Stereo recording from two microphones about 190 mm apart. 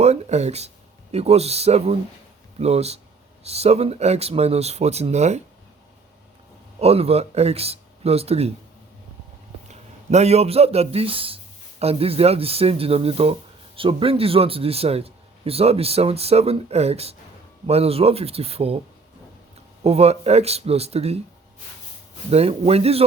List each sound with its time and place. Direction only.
0.0 s a man's voice: 35° right (ahead or behind)
6.7 s a man's voice: 30° right (ahead or behind)
9.6 s a man's voice: 35° right (ahead or behind)
19.8 s a man's voice: 35° right (ahead or behind)
22.3 s a man's voice: 30° right (ahead or behind)